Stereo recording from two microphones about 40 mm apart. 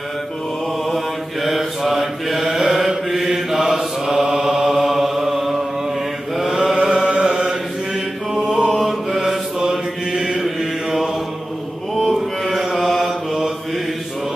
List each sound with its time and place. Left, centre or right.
0.9 s mantra: centre
6.8 s chant: right
8.4 s chant: centre
9.2 s mantra: centre